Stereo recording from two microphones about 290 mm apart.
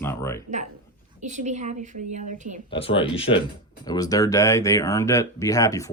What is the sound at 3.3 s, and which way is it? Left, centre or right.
Speech, left.